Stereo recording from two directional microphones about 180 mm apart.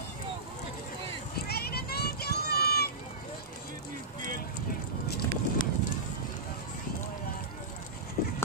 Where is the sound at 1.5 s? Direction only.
60° left (ahead or behind).